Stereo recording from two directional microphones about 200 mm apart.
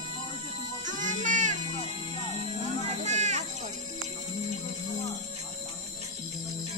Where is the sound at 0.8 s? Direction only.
40° right (ahead or behind).